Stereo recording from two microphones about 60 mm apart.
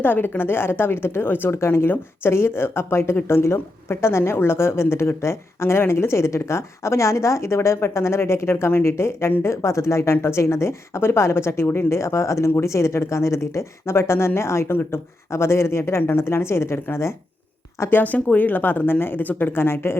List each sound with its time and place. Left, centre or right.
0.0 s a woman's voice: left
17.9 s speech: left